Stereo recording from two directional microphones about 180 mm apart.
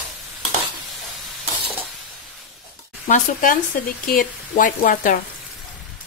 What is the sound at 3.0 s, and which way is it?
Speech, 45° left (ahead or behind).